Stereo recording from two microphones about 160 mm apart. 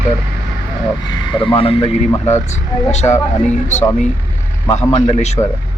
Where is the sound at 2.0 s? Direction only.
15° left (ahead or behind).